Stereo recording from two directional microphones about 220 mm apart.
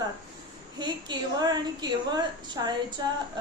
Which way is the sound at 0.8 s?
20° right (ahead or behind).